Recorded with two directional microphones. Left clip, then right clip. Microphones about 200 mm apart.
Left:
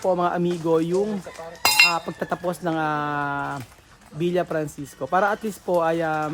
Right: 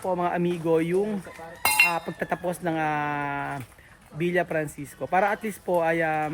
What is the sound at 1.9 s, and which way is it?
Speech, 15° left (ahead or behind).